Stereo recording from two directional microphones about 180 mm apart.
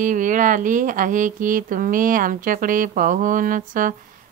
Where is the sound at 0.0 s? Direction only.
45° right (ahead or behind).